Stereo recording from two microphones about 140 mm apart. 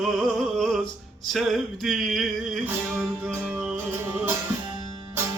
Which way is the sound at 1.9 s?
Centre (ahead or behind).